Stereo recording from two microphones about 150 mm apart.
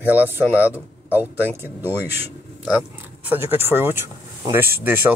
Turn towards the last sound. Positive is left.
turn(degrees=-15)  # may be behind; listen again after turning